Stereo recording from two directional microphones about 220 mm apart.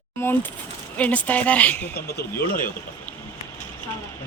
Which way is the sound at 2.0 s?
45° left (ahead or behind).